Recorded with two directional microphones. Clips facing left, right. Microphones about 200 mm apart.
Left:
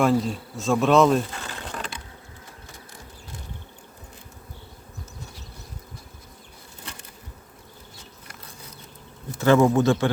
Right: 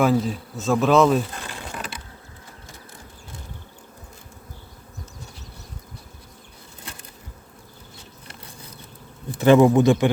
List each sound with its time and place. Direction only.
0.0 s speech: centre (ahead or behind)
1.5 s mechanisms: 10° right (ahead or behind)
9.4 s speech: 15° right (ahead or behind)